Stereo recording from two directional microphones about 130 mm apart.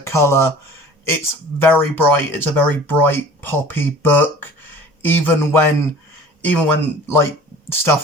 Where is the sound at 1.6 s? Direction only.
15° left (ahead or behind).